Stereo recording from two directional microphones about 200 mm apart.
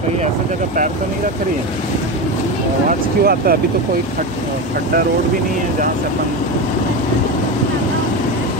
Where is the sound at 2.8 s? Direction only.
45° right (ahead or behind).